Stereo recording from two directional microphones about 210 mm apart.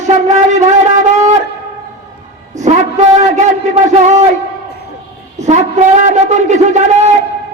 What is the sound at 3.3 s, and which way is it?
Speech, 35° right (ahead or behind).